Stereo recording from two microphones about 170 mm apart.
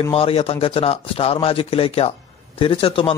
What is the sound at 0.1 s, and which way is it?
A man's voice, 35° left (ahead or behind).